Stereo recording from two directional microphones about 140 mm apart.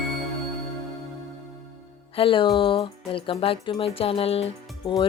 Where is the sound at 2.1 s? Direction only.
40° left (ahead or behind).